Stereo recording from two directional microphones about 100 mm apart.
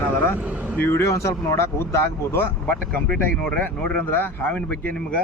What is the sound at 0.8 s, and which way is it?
Speech, 25° left (ahead or behind).